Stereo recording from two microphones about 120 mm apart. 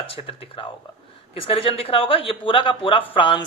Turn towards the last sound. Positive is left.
turn(degrees=45)  # may be behind; listen again after turning